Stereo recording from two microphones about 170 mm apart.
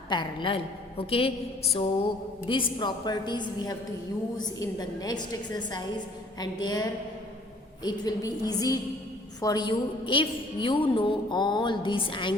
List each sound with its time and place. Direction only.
0.1 s a woman's voice: 25° left (ahead or behind)
7.9 s a woman's voice: 20° left (ahead or behind)